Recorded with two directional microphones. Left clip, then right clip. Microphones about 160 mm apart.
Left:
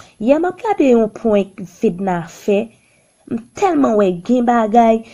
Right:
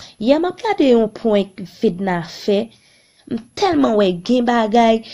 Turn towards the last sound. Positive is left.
turn(degrees=-15)  # may be behind; listen again after turning